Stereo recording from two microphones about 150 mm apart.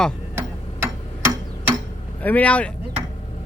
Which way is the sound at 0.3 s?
15° right (ahead or behind).